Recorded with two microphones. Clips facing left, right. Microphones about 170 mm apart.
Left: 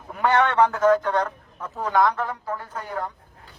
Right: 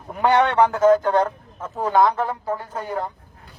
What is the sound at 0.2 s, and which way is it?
A man's voice, 30° right (ahead or behind).